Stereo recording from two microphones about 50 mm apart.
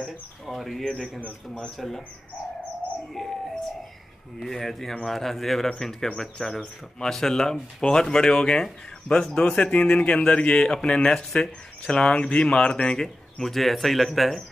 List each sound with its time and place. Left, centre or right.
0.5 s speech: centre
1.2 s a man's voice: centre
1.8 s speech: centre
3.2 s speech: centre
4.4 s a man's voice: centre